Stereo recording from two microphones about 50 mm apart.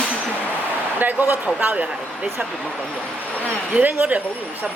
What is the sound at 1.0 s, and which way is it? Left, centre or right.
Speech, right.